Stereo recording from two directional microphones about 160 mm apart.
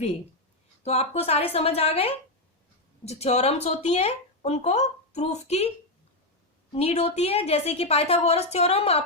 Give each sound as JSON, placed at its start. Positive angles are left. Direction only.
{"t": 0.9, "sound": "speech", "side_deg": 40}
{"t": 6.7, "sound": "speech", "side_deg": 40}